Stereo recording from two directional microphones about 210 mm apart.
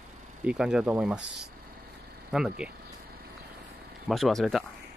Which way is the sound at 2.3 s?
5° right (ahead or behind).